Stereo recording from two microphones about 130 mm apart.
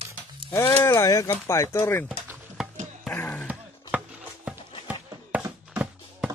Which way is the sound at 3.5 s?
10° right (ahead or behind).